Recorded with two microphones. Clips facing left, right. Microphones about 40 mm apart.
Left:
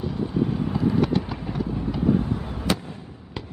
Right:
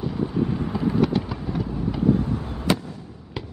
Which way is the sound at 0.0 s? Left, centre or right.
Centre.